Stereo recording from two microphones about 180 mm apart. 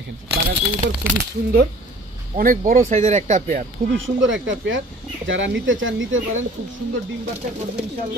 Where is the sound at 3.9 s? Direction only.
90° right.